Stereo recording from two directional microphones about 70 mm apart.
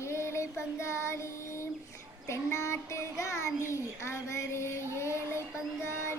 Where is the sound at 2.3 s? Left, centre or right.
Left.